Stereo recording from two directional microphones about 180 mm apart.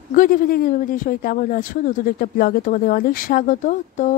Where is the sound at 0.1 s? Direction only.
50° left (ahead or behind).